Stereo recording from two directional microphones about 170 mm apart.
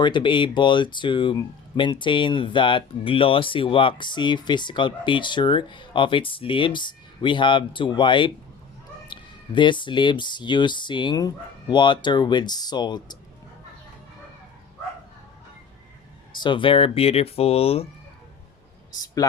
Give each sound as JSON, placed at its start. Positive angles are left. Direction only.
{"t": 0.0, "sound": "speech", "side_deg": 30}
{"t": 9.6, "sound": "speech", "side_deg": 30}
{"t": 16.3, "sound": "speech", "side_deg": 25}
{"t": 18.9, "sound": "a man's voice", "side_deg": 20}